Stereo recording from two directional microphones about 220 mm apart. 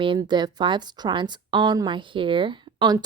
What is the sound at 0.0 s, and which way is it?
A woman's voice, 20° right (ahead or behind).